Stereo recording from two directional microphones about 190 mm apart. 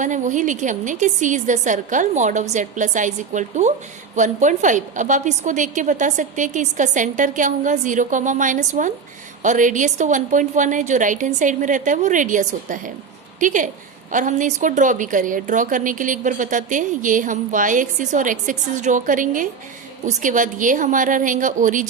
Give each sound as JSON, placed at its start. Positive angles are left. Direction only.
{"t": 0.0, "sound": "a woman's voice", "side_deg": -40}